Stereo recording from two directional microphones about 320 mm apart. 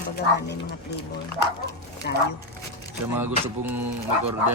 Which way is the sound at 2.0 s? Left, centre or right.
Left.